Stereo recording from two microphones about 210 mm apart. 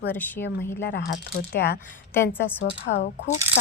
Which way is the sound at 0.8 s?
45° left (ahead or behind).